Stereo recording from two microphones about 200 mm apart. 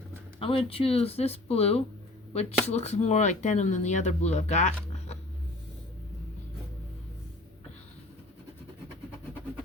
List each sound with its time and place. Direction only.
0.3 s speech: 30° left (ahead or behind)